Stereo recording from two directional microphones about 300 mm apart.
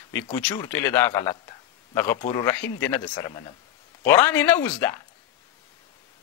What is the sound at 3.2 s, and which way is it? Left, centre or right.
A man's voice, centre.